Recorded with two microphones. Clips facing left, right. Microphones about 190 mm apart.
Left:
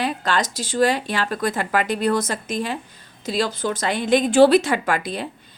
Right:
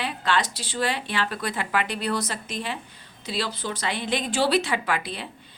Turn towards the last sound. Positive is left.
turn(degrees=45)  # may be behind; listen again after turning